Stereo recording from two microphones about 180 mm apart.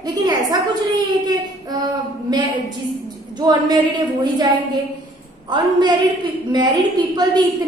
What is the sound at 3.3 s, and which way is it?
Speech, 20° right (ahead or behind).